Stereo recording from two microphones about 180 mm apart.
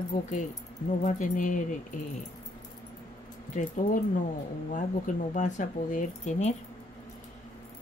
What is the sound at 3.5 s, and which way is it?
Speech, 45° left (ahead or behind).